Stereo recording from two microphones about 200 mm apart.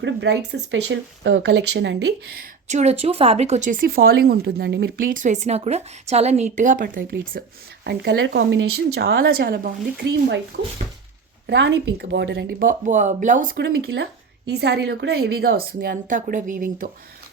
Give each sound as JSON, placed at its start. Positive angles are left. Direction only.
{"t": 0.0, "sound": "speech", "side_deg": -60}
{"t": 2.6, "sound": "speech", "side_deg": -35}
{"t": 7.9, "sound": "speech", "side_deg": -55}
{"t": 11.4, "sound": "speech", "side_deg": -60}